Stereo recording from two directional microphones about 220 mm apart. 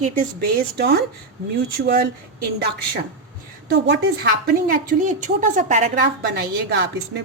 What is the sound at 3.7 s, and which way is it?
A woman's voice, 45° right (ahead or behind).